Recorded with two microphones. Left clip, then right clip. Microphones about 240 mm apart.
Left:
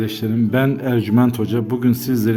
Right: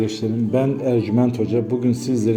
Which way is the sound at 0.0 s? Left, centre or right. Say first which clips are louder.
Left 1 dB; left.